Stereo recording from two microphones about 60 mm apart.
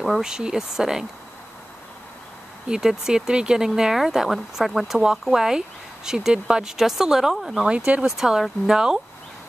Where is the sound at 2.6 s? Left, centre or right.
Centre.